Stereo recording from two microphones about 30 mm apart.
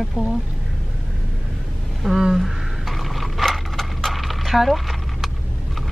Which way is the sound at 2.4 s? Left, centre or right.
Centre.